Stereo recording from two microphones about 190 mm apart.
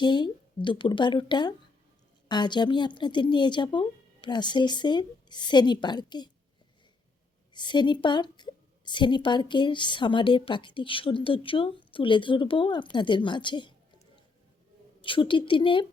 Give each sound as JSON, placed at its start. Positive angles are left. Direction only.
{"t": 0.0, "sound": "a woman's voice", "side_deg": 25}
{"t": 7.5, "sound": "a woman's voice", "side_deg": 25}